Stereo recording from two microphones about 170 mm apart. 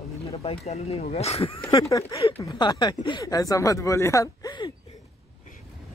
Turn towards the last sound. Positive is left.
turn(degrees=25)  # may be behind; listen again after turning